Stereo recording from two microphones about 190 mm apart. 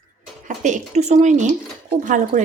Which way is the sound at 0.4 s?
40° right (ahead or behind).